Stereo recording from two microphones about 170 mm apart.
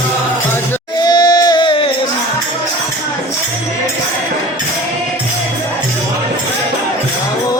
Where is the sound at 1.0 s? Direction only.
25° left (ahead or behind).